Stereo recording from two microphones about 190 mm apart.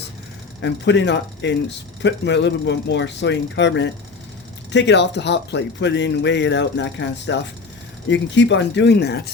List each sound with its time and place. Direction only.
0.6 s speech: 65° left (ahead or behind)